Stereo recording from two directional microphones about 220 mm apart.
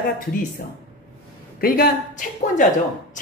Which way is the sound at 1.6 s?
40° left (ahead or behind).